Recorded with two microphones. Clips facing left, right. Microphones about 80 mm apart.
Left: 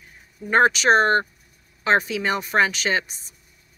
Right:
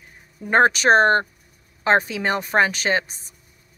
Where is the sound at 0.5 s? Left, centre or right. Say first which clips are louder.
Right 1 dB; right.